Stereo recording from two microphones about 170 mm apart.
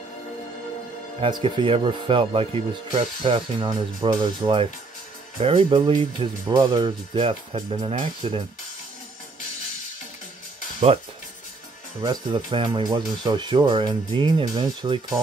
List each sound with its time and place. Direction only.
1.2 s speech: 30° right (ahead or behind)
12.0 s speech: 25° right (ahead or behind)